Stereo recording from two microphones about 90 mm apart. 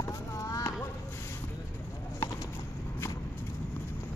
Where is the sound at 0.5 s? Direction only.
35° left (ahead or behind).